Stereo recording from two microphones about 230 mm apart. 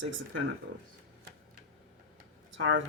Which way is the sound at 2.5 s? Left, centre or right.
Right.